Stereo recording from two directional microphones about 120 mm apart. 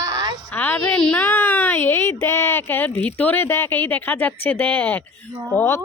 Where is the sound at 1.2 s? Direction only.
20° left (ahead or behind).